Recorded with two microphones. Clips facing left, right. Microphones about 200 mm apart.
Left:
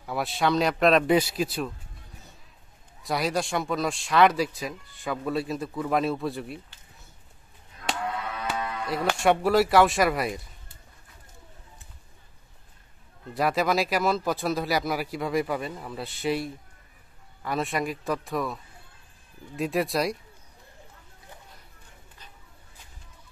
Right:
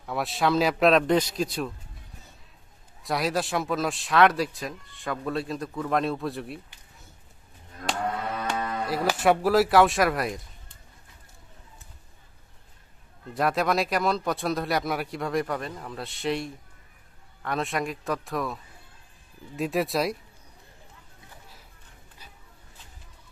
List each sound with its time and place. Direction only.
0.0 s speech: centre (ahead or behind)
3.0 s speech: centre (ahead or behind)
7.8 s music: 40° right (ahead or behind)
8.5 s cattle: 40° right (ahead or behind)
8.8 s speech: 5° right (ahead or behind)
13.3 s speech: centre (ahead or behind)